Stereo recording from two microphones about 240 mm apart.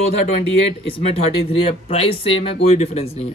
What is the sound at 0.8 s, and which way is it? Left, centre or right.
Speech, left.